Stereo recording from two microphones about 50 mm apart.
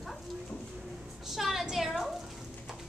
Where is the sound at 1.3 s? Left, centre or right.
Centre.